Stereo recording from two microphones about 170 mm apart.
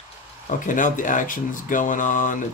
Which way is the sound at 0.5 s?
50° left (ahead or behind).